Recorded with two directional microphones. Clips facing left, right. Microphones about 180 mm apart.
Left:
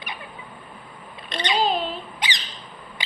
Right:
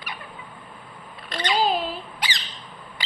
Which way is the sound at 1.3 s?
20° left (ahead or behind).